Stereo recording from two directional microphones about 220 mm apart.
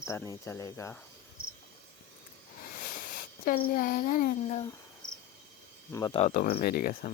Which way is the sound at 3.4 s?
40° left (ahead or behind).